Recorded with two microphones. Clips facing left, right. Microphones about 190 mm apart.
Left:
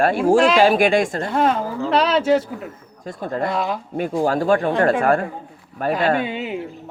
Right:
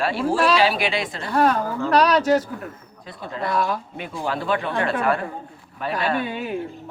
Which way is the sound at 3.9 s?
45° left (ahead or behind).